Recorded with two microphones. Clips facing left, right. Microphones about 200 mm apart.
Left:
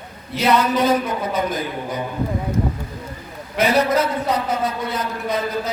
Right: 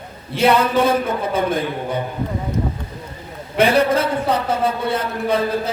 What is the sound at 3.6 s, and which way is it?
A man's voice, 30° right (ahead or behind).